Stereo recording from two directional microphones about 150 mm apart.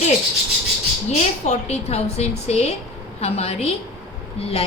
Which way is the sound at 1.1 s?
45° left (ahead or behind).